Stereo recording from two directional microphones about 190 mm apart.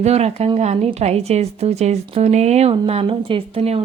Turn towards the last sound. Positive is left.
turn(degrees=-30)  # may be behind; listen again after turning